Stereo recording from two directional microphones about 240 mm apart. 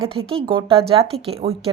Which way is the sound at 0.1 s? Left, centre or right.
Right.